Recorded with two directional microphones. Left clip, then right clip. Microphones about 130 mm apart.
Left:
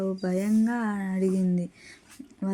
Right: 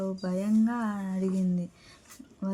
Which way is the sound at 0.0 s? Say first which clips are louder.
Left 4 dB; 25° left (ahead or behind).